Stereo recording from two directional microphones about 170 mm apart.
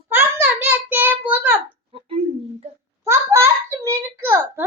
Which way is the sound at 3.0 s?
15° right (ahead or behind).